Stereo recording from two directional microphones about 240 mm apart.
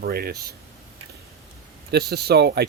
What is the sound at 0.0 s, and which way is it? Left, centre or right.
Speech, right.